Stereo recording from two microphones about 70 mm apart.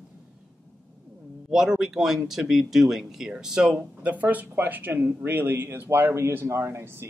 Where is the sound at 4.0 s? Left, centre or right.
Right.